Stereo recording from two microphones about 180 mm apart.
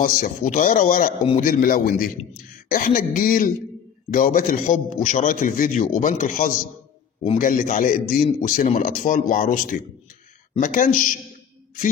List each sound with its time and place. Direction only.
0.0 s a man's voice: 50° left (ahead or behind)